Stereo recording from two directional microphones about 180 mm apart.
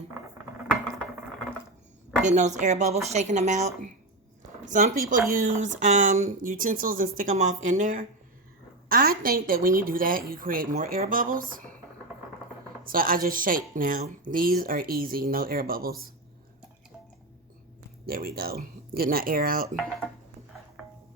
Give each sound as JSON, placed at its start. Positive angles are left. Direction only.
{"t": 2.2, "sound": "a woman's voice", "side_deg": -40}
{"t": 12.8, "sound": "speech", "side_deg": -50}
{"t": 18.0, "sound": "speech", "side_deg": -55}